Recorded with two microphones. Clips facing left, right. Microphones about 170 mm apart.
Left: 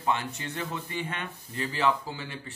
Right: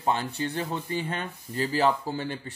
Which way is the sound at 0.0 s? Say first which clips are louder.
Right 3 dB; 35° right (ahead or behind).